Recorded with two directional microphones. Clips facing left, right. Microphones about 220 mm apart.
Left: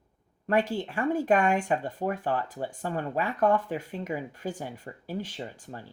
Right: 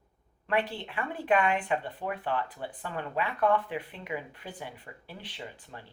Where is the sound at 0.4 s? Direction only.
45° left (ahead or behind).